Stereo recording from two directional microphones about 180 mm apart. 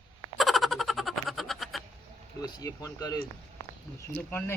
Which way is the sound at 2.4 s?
20° left (ahead or behind).